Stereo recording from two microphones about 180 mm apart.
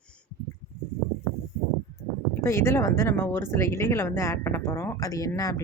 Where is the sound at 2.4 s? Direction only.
15° left (ahead or behind).